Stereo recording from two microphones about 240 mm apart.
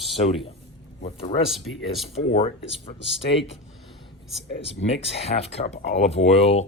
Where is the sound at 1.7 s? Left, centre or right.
Left.